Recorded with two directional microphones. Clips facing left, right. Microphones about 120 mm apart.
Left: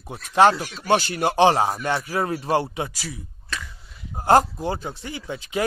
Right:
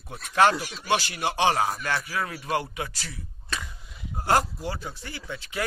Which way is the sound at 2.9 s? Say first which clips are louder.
Left 6 dB; 10° left (ahead or behind).